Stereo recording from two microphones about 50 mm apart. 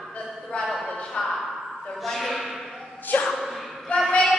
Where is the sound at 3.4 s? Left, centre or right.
Centre.